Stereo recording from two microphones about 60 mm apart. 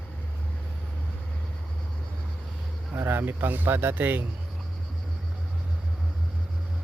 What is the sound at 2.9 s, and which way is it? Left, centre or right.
Speech, right.